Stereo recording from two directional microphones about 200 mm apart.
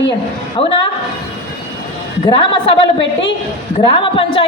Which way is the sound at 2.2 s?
25° left (ahead or behind).